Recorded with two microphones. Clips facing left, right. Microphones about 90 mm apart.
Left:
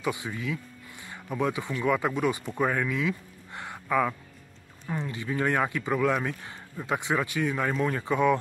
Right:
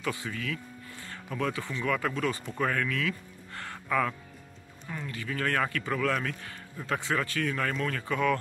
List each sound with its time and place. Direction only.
0.0 s speech: 20° left (ahead or behind)
2.5 s a sound: 15° left (ahead or behind)
4.8 s speech: 20° left (ahead or behind)